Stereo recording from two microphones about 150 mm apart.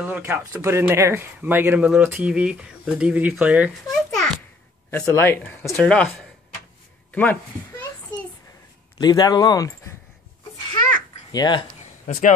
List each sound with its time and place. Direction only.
0.0 s speech: 15° right (ahead or behind)
3.9 s a sound: centre (ahead or behind)
4.9 s speech: 15° left (ahead or behind)
8.9 s a man's voice: 25° left (ahead or behind)
11.3 s speech: 30° left (ahead or behind)
12.1 s speech: 55° left (ahead or behind)